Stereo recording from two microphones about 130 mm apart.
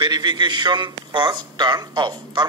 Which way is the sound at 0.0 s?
35° right (ahead or behind).